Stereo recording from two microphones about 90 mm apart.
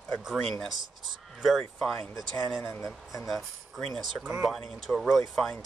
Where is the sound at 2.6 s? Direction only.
25° left (ahead or behind).